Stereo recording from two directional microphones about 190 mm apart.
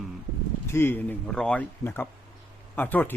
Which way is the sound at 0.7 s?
10° left (ahead or behind).